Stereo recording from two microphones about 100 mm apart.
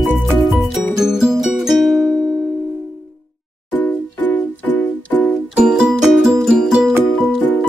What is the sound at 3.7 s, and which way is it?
Music, 15° left (ahead or behind).